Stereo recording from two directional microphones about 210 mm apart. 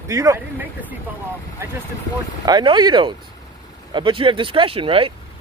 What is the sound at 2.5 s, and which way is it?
Speech, 20° right (ahead or behind).